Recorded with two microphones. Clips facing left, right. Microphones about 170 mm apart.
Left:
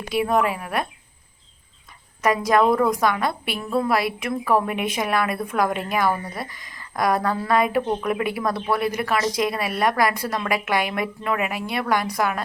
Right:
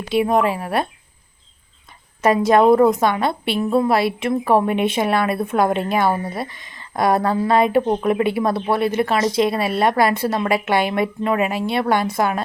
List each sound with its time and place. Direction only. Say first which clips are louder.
0.1 s a woman's voice: right 4 dB; 25° right (ahead or behind)
2.2 s a woman's voice: right 5 dB; 25° right (ahead or behind)